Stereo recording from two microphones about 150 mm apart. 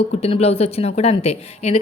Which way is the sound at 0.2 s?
45° left (ahead or behind).